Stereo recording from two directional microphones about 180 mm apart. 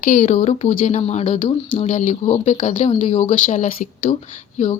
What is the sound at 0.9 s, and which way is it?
Speech, 35° left (ahead or behind).